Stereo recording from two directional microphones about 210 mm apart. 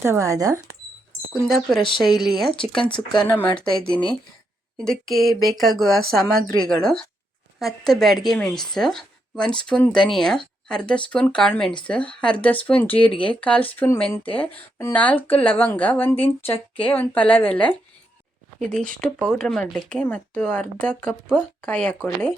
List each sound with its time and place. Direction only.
0.0 s speech: 15° right (ahead or behind)
1.3 s a woman's voice: centre (ahead or behind)
1.8 s speech: 25° left (ahead or behind)
2.0 s a woman's voice: centre (ahead or behind)
2.9 s speech: 20° left (ahead or behind)
3.8 s a woman's voice: 5° left (ahead or behind)